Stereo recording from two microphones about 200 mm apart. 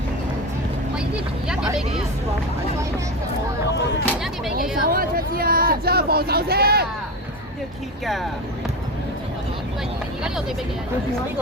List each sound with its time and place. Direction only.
4.8 s speech: 45° right (ahead or behind)
8.0 s speech: centre (ahead or behind)